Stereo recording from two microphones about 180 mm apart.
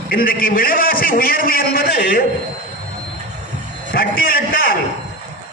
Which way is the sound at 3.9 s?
55° left (ahead or behind).